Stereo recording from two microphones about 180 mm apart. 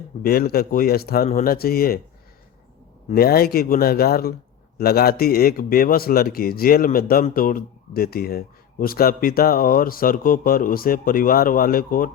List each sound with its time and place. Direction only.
0.2 s speech: 55° left (ahead or behind)
3.2 s speech: 55° left (ahead or behind)